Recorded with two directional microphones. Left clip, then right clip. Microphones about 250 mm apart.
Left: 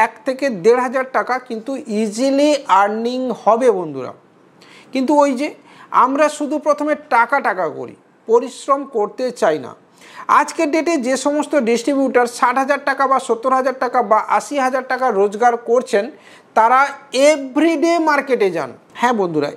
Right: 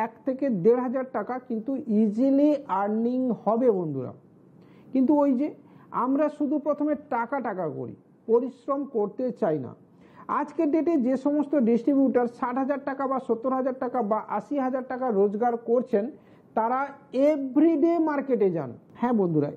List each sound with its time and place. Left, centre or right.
0.0 s a woman's voice: centre
5.2 s a woman's voice: centre